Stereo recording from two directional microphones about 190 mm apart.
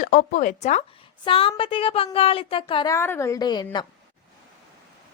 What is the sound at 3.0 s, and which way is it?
Speech, 15° left (ahead or behind).